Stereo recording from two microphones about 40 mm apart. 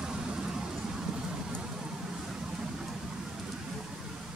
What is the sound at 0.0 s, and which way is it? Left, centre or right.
Vehicle, centre.